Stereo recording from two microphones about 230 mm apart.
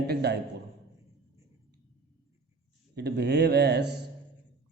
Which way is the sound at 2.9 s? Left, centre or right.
Right.